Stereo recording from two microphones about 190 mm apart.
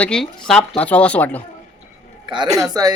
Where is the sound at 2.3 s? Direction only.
20° right (ahead or behind).